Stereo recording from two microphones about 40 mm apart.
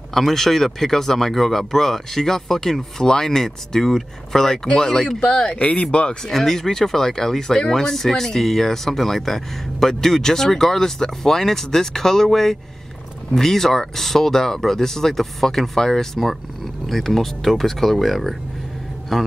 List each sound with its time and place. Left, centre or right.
0.1 s speech: centre; by 6.1 s left
6.2 s speech: centre